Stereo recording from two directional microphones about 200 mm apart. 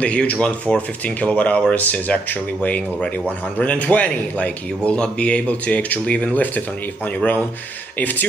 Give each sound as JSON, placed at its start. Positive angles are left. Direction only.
{"t": 0.0, "sound": "speech", "side_deg": 5}